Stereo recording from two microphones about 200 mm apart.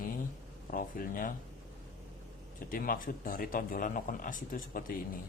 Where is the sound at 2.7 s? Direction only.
45° left (ahead or behind).